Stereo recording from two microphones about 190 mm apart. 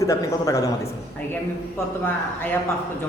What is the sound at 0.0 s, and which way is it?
Speech, 15° left (ahead or behind).